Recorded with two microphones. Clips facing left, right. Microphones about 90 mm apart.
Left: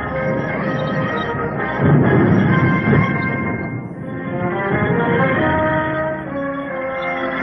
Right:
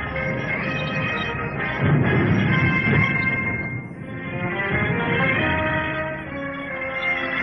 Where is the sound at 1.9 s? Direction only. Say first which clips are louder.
Left 7 dB; 55° left (ahead or behind).